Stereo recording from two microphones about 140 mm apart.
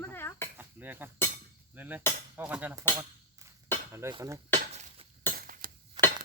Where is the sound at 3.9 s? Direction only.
20° right (ahead or behind).